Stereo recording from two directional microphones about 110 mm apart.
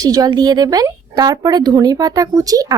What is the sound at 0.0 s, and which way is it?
Speech, 35° right (ahead or behind).